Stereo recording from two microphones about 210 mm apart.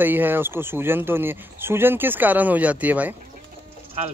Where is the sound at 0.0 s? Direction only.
10° right (ahead or behind).